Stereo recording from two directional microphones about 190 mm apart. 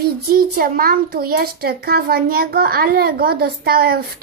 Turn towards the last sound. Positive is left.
turn(degrees=-55)  # may be behind; listen again after turning